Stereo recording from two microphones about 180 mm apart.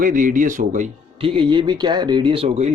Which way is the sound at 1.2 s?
30° right (ahead or behind).